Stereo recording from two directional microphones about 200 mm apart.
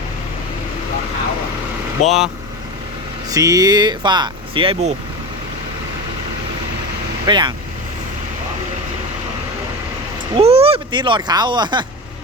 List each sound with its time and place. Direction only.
2.0 s speech: centre (ahead or behind)
3.2 s speech: 15° right (ahead or behind)
7.3 s speech: 25° right (ahead or behind)
10.3 s speech: 30° right (ahead or behind)